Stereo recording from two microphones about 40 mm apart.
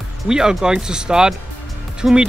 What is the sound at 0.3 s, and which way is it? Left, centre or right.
Speech, centre.